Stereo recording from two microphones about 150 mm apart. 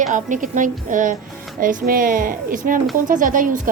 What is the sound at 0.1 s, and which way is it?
Speech, 55° right (ahead or behind).